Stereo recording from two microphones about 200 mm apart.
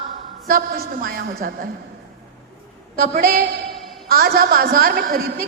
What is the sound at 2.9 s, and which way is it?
A woman's voice, 45° right (ahead or behind).